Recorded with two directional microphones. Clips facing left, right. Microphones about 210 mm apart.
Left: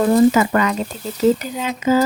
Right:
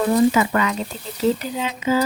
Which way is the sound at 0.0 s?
45° left (ahead or behind).